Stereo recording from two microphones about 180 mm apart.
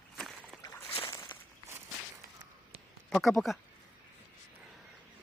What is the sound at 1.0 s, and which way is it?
Walk, 30° left (ahead or behind).